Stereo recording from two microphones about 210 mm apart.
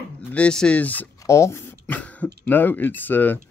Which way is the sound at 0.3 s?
5° left (ahead or behind).